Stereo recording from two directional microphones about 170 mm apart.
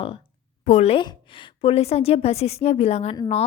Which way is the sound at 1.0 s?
25° left (ahead or behind).